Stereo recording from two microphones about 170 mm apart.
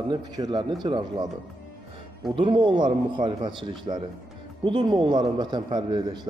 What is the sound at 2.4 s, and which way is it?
Speech, 30° right (ahead or behind).